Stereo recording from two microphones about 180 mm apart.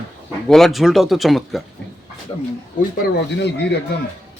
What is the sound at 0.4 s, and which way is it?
Speech, centre (ahead or behind).